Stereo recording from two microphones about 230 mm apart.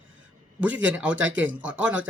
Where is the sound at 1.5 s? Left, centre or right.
Centre.